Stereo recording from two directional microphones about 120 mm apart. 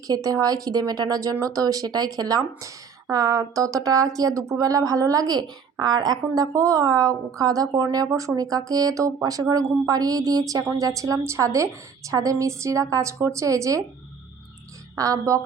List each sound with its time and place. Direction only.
0.1 s a woman's voice: 30° right (ahead or behind)
14.9 s a woman's voice: 30° right (ahead or behind)